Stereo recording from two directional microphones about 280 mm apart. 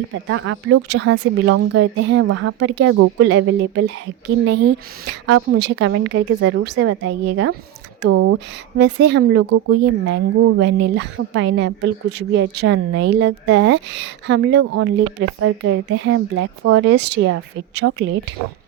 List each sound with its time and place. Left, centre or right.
0.3 s speech: right
8.0 s speech: right
8.8 s speech: right